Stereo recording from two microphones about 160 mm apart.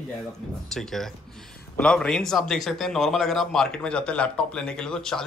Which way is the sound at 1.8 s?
5° left (ahead or behind).